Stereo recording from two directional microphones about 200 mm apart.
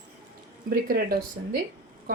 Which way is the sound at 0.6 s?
45° right (ahead or behind).